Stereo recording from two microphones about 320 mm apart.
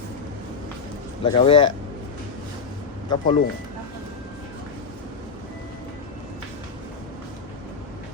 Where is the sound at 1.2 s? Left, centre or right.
Centre.